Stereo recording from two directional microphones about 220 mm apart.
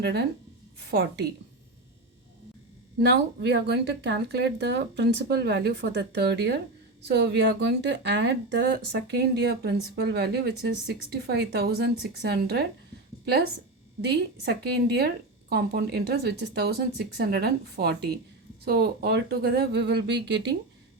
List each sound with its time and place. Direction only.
0.0 s a woman's voice: 50° right (ahead or behind)
3.1 s a woman's voice: 50° right (ahead or behind)
14.1 s a woman's voice: 50° right (ahead or behind)